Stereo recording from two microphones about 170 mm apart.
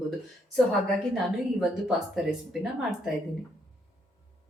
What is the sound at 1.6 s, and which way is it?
A woman's voice, 5° right (ahead or behind).